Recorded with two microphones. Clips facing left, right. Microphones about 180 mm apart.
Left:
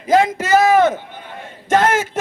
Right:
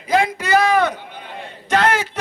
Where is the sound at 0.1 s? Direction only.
45° left (ahead or behind).